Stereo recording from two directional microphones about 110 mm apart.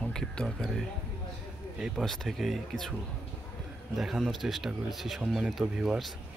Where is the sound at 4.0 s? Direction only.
Centre (ahead or behind).